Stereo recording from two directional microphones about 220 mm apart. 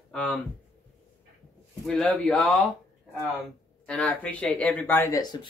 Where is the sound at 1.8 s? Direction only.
5° left (ahead or behind).